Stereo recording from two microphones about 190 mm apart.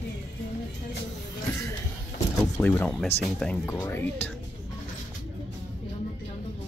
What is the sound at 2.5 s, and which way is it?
Speech, 10° left (ahead or behind).